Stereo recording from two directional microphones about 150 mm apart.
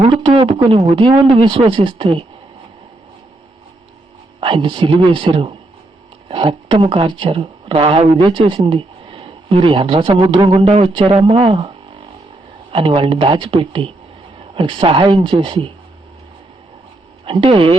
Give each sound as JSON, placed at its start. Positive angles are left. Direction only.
{"t": 0.2, "sound": "speech", "side_deg": -35}
{"t": 4.4, "sound": "speech", "side_deg": -35}
{"t": 17.2, "sound": "speech", "side_deg": -35}